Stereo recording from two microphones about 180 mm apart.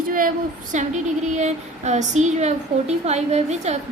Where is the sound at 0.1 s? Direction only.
50° right (ahead or behind).